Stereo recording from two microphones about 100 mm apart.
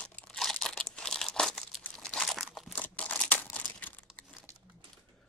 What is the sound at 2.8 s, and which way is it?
Crumpling, 15° left (ahead or behind).